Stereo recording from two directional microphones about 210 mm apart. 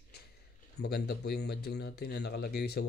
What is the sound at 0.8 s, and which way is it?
Speech, 50° left (ahead or behind).